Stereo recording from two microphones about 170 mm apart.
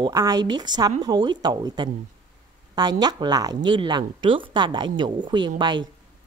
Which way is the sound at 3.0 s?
25° right (ahead or behind).